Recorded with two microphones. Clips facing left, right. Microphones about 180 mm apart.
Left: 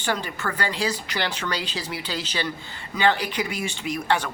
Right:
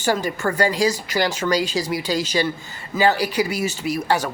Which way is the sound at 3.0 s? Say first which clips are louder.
Right 4 dB; 40° right (ahead or behind).